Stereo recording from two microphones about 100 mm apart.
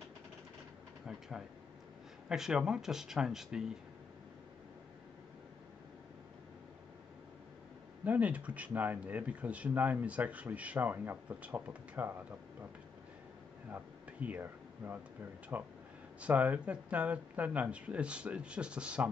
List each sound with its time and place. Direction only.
2.2 s speech: 5° right (ahead or behind)
8.0 s speech: 15° right (ahead or behind)
13.7 s a sound: 20° right (ahead or behind)
15.5 s speech: 20° right (ahead or behind)